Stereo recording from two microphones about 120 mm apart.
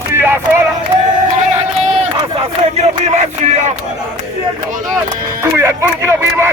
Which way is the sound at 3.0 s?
75° right (ahead or behind).